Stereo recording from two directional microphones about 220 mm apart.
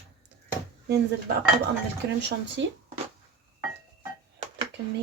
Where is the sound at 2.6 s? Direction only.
55° right (ahead or behind).